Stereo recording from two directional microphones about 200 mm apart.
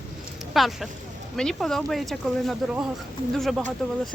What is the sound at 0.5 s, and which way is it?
Speech, centre (ahead or behind).